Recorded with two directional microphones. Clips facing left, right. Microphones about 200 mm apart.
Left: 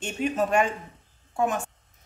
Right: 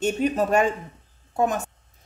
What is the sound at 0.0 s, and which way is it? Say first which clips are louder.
A woman's voice: right 4 dB; 40° right (ahead or behind).